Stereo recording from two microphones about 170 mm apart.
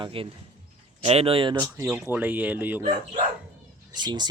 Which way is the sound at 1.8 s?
10° right (ahead or behind).